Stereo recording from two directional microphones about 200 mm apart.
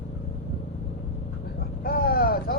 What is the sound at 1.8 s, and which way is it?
Vehicle, 50° left (ahead or behind).